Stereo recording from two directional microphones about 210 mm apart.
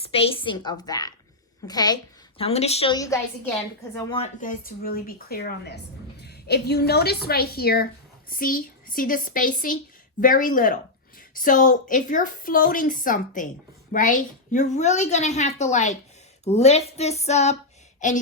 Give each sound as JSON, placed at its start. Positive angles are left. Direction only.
{"t": 0.0, "sound": "a woman's voice", "side_deg": 25}
{"t": 2.4, "sound": "a woman's voice", "side_deg": 30}
{"t": 4.1, "sound": "speech", "side_deg": 35}